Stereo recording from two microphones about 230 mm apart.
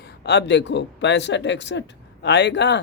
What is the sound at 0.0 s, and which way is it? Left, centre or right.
Speech, left.